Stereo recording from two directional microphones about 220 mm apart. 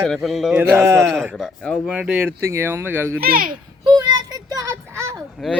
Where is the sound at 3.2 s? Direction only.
40° right (ahead or behind).